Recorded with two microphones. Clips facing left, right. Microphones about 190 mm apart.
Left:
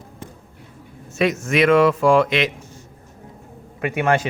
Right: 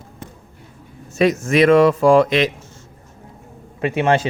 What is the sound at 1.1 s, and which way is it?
A man's voice, 40° right (ahead or behind).